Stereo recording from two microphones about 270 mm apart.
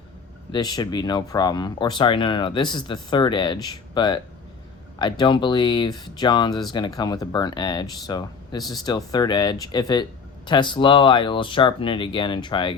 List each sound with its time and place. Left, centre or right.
0.5 s speech: centre